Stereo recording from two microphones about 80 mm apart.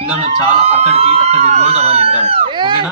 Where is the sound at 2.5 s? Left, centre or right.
Right.